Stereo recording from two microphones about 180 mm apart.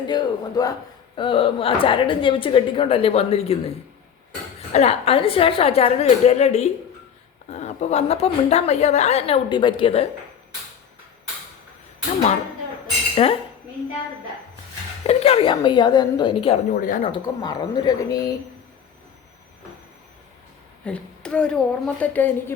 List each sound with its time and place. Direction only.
0.1 s a man's voice: 20° left (ahead or behind)
4.7 s a woman's voice: 35° left (ahead or behind)
13.2 s a woman's voice: 35° left (ahead or behind)
15.0 s a man's voice: 30° left (ahead or behind)
16.7 s speech: 50° left (ahead or behind)
17.0 s a man's voice: 25° left (ahead or behind)
20.8 s a woman's voice: 5° left (ahead or behind)